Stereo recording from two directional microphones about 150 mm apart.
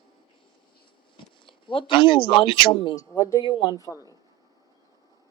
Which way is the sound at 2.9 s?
20° left (ahead or behind).